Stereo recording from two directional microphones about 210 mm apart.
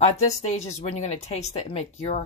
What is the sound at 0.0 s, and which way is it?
Speech, 30° left (ahead or behind).